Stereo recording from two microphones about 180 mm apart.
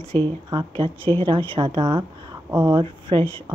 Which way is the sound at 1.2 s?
30° right (ahead or behind).